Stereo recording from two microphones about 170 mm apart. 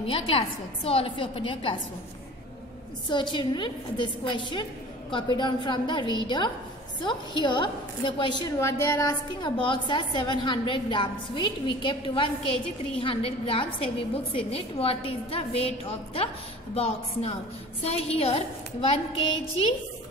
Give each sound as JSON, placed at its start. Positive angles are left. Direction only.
{"t": 0.0, "sound": "a woman's voice", "side_deg": 35}
{"t": 3.1, "sound": "a woman's voice", "side_deg": 25}